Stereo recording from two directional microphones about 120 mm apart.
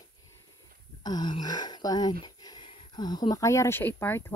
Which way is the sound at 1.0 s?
35° left (ahead or behind).